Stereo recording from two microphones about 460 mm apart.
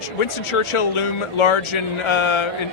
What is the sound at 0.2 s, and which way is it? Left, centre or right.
Speech, left.